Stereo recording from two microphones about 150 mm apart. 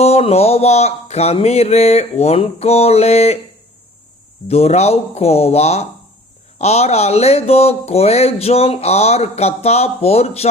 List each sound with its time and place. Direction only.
0.0 s speech: 45° left (ahead or behind)
4.4 s speech: 45° left (ahead or behind)